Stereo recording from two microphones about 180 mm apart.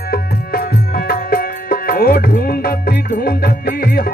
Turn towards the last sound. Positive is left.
turn(degrees=55)  # may be behind; listen again after turning